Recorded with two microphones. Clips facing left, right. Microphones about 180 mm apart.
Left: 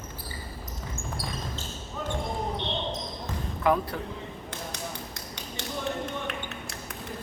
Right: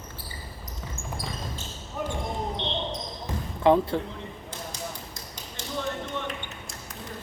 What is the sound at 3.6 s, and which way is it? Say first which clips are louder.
Speech: right 5 dB; 25° right (ahead or behind).